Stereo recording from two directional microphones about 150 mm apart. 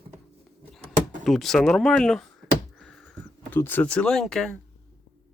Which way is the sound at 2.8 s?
Centre (ahead or behind).